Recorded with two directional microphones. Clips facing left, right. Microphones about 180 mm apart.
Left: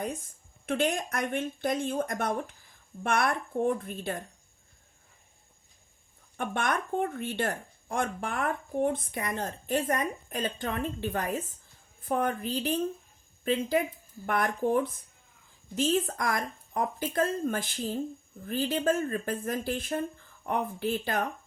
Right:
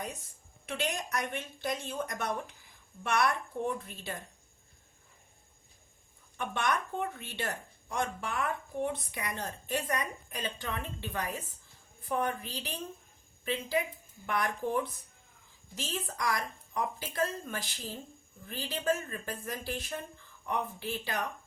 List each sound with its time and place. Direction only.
0.0 s speech: 50° left (ahead or behind)
6.3 s speech: 50° left (ahead or behind)